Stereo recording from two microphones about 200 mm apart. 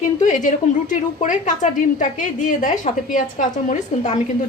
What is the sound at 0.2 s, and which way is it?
A woman's voice, 40° left (ahead or behind).